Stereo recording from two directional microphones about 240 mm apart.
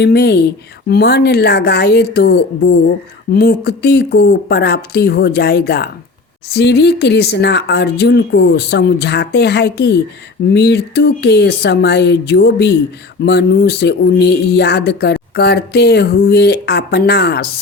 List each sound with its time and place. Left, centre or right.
0.0 s speech: left